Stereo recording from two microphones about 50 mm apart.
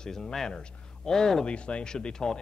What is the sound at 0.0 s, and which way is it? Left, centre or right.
Speech, centre.